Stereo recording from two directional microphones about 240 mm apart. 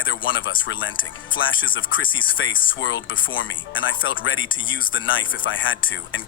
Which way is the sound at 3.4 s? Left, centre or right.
Left.